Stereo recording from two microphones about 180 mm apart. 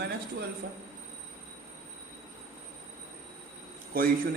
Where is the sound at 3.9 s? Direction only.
50° right (ahead or behind).